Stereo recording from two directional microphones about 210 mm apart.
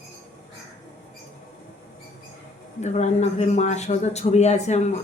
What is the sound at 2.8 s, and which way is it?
A man's voice, 35° left (ahead or behind).